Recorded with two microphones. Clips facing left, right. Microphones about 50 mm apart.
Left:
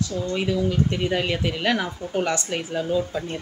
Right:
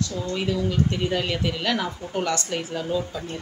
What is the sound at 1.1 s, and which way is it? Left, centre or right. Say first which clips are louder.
Speech: left 2 dB; left.